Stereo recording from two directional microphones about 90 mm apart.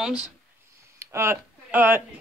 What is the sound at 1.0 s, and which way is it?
Speech, 30° right (ahead or behind).